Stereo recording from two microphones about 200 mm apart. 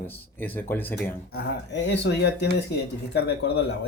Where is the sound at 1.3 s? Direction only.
60° left (ahead or behind).